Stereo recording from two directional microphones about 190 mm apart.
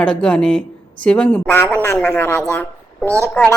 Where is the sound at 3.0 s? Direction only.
15° right (ahead or behind).